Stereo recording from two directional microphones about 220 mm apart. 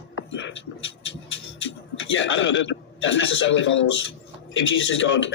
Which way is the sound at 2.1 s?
60° left (ahead or behind).